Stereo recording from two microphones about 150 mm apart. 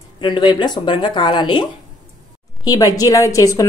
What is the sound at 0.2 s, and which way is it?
A woman's voice, 30° left (ahead or behind).